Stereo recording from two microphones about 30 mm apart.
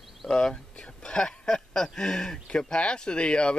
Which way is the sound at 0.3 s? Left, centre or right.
Left.